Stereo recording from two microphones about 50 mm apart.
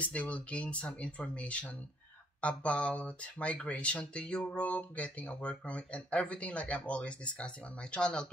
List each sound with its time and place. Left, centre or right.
0.0 s speech: left